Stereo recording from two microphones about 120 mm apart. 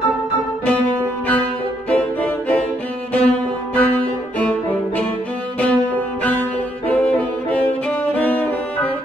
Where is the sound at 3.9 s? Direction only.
15° left (ahead or behind).